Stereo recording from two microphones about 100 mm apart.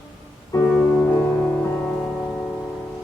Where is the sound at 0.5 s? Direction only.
35° left (ahead or behind).